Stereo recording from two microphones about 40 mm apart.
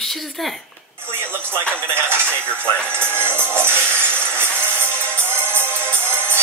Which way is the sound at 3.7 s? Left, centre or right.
Left.